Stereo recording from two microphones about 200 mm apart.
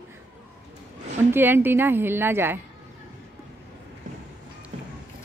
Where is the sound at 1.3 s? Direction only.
10° right (ahead or behind).